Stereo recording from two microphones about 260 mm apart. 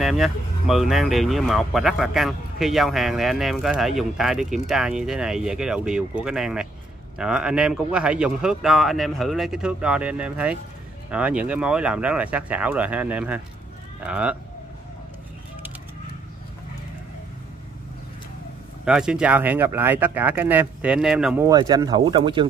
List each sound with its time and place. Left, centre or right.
0.0 s speech: centre
18.9 s speech: centre
21.5 s speech: centre